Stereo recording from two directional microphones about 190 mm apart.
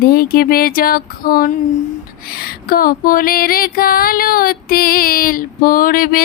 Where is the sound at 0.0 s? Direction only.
55° left (ahead or behind).